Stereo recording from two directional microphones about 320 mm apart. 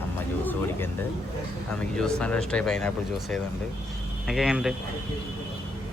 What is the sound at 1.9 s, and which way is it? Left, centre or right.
Speech, centre.